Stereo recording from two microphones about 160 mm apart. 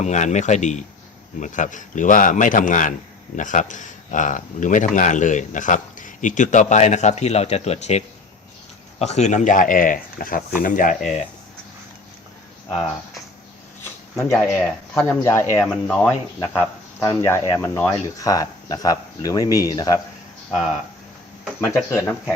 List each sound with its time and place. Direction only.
0.0 s a man's voice: 45° left (ahead or behind)
13.8 s speech: 15° left (ahead or behind)
21.8 s speech: 20° left (ahead or behind)